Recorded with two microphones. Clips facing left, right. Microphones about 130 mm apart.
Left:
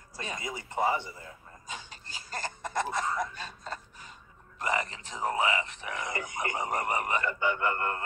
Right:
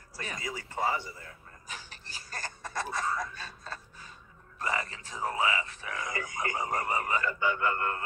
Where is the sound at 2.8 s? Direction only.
20° left (ahead or behind).